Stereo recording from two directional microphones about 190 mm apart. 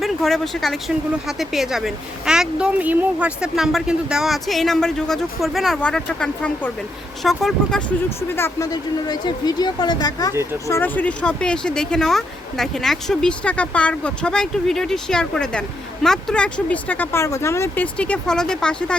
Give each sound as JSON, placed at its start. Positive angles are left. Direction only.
{"t": 0.0, "sound": "speech", "side_deg": 0}
{"t": 8.4, "sound": "speech", "side_deg": 15}